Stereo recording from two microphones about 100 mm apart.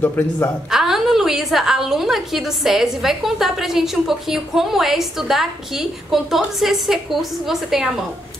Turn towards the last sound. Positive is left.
turn(degrees=-5)  # may be behind; listen again after turning